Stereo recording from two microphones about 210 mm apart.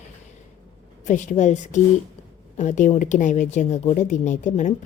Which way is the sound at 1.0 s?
35° left (ahead or behind).